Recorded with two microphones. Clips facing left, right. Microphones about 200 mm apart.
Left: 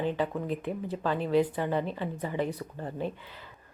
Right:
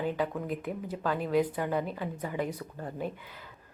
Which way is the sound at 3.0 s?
10° right (ahead or behind).